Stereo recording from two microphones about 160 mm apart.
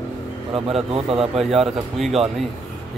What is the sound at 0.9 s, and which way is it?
Speech, 35° right (ahead or behind).